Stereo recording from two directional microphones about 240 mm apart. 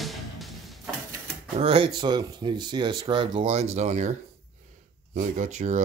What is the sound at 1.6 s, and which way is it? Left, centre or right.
Speech, right.